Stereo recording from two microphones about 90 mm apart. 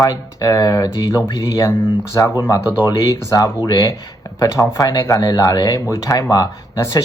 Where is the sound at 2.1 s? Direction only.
30° left (ahead or behind).